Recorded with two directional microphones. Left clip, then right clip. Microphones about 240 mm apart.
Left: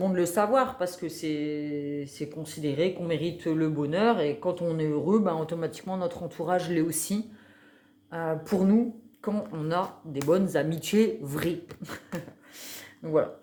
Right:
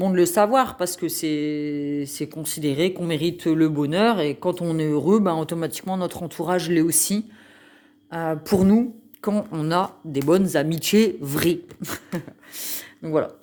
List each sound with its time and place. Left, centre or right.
0.0 s speech: right